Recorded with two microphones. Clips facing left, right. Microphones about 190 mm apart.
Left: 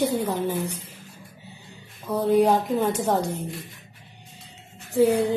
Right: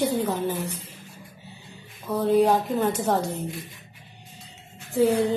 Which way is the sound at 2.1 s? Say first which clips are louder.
Left 1 dB; 15° left (ahead or behind).